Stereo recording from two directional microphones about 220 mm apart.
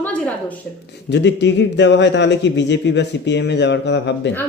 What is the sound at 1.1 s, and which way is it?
A man's voice, 55° left (ahead or behind).